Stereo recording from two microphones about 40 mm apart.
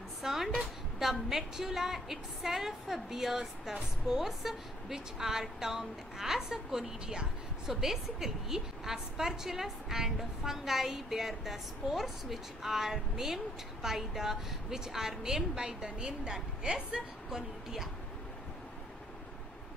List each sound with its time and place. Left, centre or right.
0.2 s music: centre
1.3 s a woman's voice: centre